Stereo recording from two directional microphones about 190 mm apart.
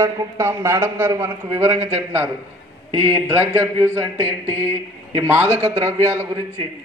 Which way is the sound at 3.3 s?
15° right (ahead or behind).